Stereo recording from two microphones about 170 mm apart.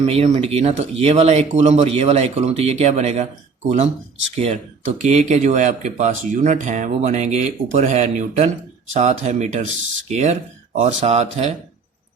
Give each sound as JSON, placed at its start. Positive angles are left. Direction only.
{"t": 0.0, "sound": "speech", "side_deg": -40}
{"t": 4.4, "sound": "speech", "side_deg": -40}